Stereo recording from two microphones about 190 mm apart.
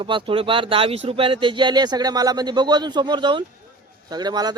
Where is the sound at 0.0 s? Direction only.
25° right (ahead or behind).